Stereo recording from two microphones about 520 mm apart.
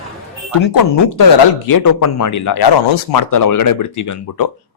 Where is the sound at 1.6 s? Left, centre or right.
Left.